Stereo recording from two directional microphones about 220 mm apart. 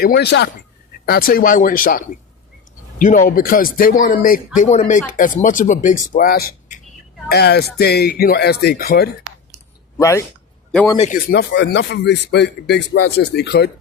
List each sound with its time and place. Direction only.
0.0 s speech: 50° left (ahead or behind)
10.0 s a man's voice: 10° left (ahead or behind)
10.9 s speech: 30° left (ahead or behind)
11.3 s speech: 50° left (ahead or behind)